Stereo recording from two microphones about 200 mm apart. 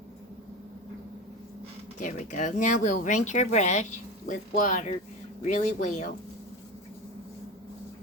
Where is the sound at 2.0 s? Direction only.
40° left (ahead or behind).